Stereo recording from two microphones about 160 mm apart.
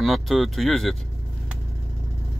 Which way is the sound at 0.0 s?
Centre (ahead or behind).